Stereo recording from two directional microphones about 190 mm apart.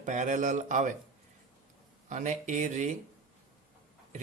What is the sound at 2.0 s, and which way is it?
Speech, 40° right (ahead or behind).